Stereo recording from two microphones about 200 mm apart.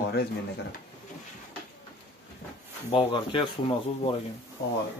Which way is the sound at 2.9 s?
25° left (ahead or behind).